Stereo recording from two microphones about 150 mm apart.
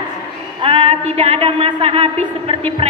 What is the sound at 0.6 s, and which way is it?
A woman's voice, 35° right (ahead or behind).